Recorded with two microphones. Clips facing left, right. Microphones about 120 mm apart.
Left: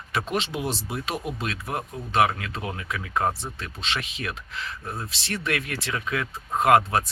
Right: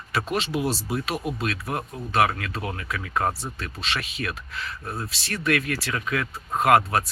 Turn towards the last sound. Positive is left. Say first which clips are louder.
# even
turn(degrees=25)  # may be behind; listen again after turning